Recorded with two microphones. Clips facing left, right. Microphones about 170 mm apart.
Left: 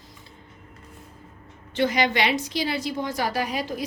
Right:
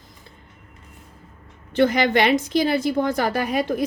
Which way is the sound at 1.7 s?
50° right (ahead or behind).